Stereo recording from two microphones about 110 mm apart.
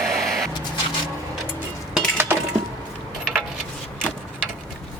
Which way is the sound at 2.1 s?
20° right (ahead or behind).